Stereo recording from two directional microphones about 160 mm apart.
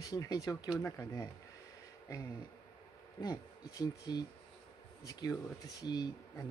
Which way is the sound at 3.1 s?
20° left (ahead or behind).